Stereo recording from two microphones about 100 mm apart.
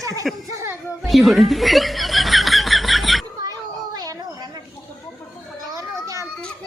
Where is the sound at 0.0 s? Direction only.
35° right (ahead or behind).